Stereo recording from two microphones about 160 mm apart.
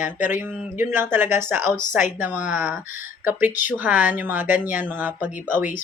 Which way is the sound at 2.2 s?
10° right (ahead or behind).